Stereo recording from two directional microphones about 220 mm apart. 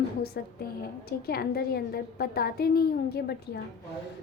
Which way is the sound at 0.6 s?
45° left (ahead or behind).